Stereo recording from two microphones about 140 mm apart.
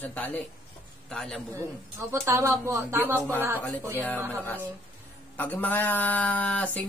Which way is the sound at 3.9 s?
15° left (ahead or behind).